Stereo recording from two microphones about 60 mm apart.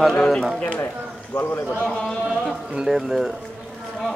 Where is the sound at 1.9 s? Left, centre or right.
Centre.